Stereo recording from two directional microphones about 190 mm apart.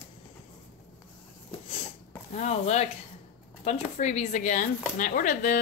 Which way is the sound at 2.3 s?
35° left (ahead or behind).